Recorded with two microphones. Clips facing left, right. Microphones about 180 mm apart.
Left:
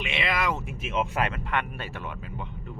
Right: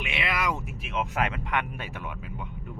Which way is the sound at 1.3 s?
15° right (ahead or behind).